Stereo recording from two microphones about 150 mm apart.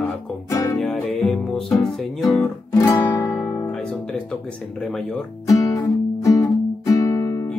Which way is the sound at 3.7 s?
5° left (ahead or behind).